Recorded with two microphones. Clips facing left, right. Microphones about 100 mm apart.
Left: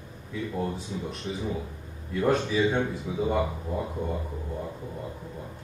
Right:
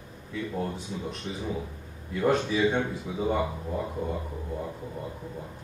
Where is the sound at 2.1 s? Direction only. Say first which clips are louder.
Even; centre (ahead or behind).